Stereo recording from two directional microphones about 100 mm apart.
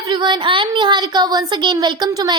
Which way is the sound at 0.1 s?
50° right (ahead or behind).